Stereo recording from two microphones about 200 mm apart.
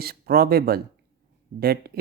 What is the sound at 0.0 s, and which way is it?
Speech, 50° right (ahead or behind).